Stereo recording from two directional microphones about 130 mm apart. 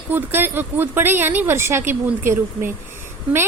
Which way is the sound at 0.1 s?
15° right (ahead or behind).